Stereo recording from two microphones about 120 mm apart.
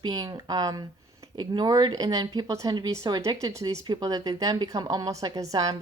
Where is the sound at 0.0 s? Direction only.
30° right (ahead or behind).